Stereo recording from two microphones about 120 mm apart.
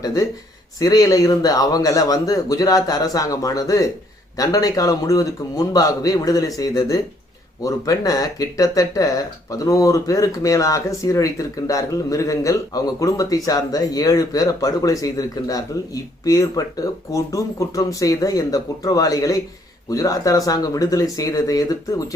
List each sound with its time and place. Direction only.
0.0 s speech: 30° left (ahead or behind)